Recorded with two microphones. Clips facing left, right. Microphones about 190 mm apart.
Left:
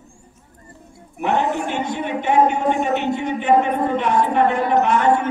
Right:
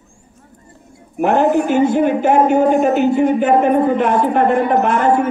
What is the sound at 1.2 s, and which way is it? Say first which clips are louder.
Speech: right 6 dB; 50° right (ahead or behind).